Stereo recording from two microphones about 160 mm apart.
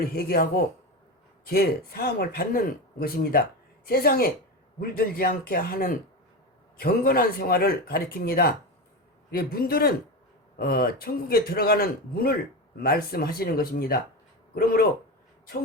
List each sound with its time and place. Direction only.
0.0 s speech: 75° left (ahead or behind)
1.5 s speech: 75° left (ahead or behind)